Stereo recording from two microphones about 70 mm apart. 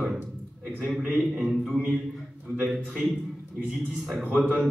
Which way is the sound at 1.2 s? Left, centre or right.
Centre.